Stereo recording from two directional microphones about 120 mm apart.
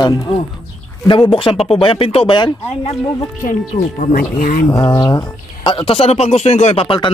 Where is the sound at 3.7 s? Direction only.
90° left.